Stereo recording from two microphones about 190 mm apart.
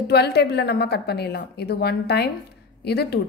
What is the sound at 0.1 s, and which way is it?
A woman's voice, 60° left (ahead or behind).